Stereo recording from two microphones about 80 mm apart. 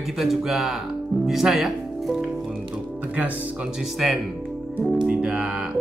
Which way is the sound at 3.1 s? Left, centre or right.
Centre.